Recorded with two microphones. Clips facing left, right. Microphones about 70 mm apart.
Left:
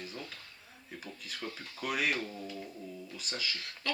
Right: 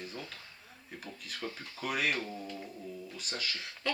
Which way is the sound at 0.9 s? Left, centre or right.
Centre.